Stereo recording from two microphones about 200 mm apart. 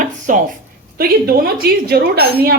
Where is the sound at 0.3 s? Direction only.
40° right (ahead or behind).